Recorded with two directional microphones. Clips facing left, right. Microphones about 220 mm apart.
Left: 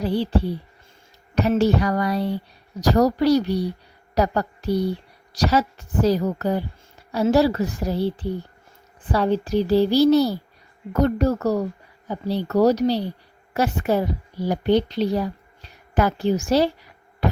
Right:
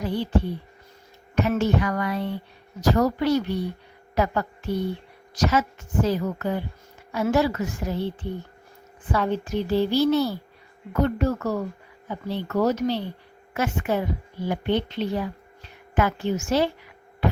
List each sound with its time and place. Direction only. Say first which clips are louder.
0.0 s a woman's voice: left 3 dB; 35° left (ahead or behind)